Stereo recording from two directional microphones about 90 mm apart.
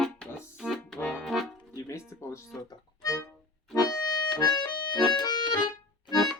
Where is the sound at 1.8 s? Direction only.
35° left (ahead or behind).